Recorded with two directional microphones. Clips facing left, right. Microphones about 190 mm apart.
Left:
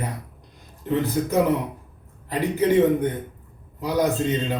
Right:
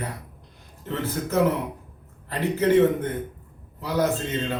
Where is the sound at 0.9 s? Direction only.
15° left (ahead or behind).